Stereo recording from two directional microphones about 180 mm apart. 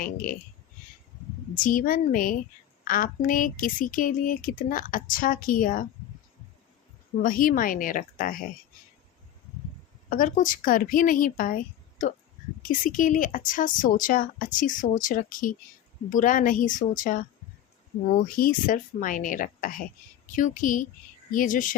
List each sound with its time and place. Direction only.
0.0 s speech: 50° left (ahead or behind)
1.5 s speech: 50° left (ahead or behind)
7.2 s speech: 50° left (ahead or behind)
10.1 s speech: 50° left (ahead or behind)